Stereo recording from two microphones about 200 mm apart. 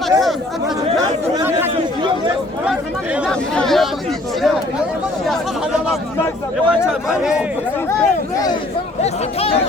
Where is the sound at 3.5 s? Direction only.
Centre (ahead or behind).